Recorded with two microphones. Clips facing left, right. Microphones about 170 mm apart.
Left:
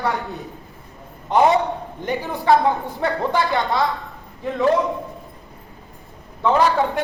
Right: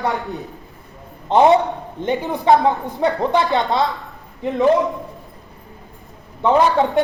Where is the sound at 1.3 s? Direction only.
25° right (ahead or behind).